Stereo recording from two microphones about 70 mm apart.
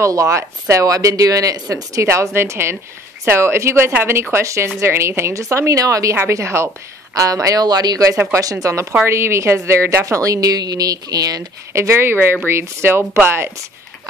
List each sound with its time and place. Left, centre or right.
0.0 s speech: right
2.0 s speech: right
7.2 s speech: right
8.3 s speech: right
9.0 s speech: right
11.7 s speech: right